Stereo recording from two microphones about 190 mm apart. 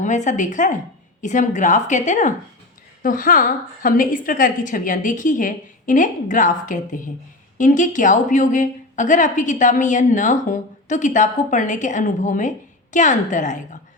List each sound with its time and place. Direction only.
0.0 s a woman's voice: 40° left (ahead or behind)